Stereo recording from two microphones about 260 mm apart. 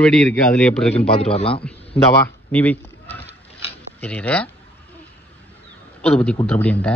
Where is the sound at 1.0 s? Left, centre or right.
Left.